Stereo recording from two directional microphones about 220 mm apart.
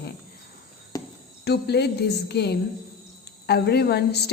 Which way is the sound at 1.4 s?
50° left (ahead or behind).